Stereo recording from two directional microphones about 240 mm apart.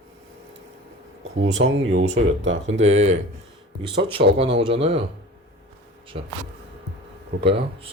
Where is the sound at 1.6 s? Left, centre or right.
Right.